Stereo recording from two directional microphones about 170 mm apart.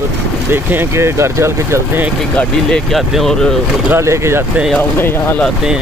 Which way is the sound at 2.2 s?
5° left (ahead or behind).